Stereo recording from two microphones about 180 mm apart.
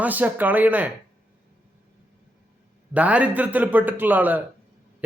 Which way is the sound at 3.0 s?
5° right (ahead or behind).